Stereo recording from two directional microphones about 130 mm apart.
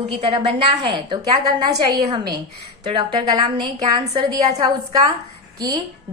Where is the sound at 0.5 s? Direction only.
40° right (ahead or behind).